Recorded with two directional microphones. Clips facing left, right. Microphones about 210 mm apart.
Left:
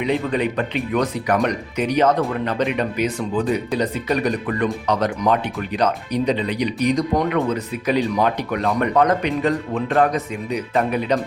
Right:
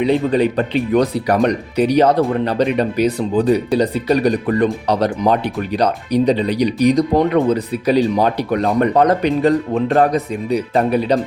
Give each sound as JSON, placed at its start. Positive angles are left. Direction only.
{"t": 0.0, "sound": "speech", "side_deg": -35}